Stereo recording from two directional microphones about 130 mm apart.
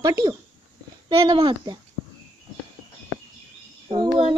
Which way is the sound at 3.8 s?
35° right (ahead or behind).